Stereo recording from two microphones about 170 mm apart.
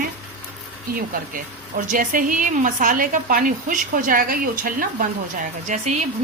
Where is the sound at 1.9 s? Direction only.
50° right (ahead or behind).